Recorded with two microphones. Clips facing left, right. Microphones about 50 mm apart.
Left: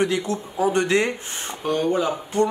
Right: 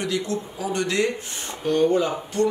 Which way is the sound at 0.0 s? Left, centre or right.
Left.